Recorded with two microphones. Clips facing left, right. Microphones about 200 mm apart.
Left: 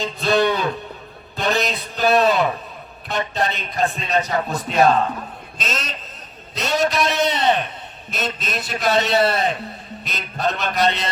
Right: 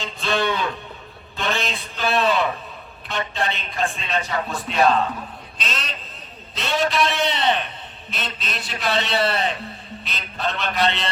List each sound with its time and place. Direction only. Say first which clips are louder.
0.0 s a man's voice: left 5 dB; 40° left (ahead or behind)